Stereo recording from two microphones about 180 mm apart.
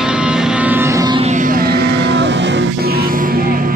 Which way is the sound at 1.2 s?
45° right (ahead or behind).